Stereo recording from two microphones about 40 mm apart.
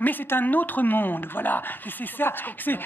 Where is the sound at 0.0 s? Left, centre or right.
Left.